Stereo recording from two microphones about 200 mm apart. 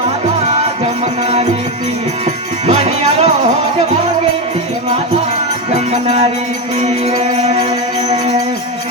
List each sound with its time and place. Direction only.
2.2 s music: 35° right (ahead or behind)
5.7 s music: 35° right (ahead or behind)